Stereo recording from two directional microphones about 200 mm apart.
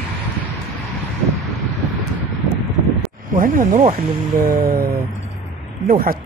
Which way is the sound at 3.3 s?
45° right (ahead or behind).